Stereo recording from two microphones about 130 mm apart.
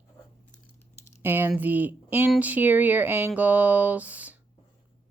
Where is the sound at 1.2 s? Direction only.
15° right (ahead or behind).